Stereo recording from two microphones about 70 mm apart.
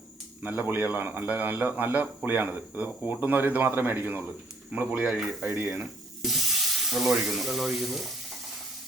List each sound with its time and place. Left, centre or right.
0.4 s a man's voice: right
5.5 s speech: right
6.2 s speech: centre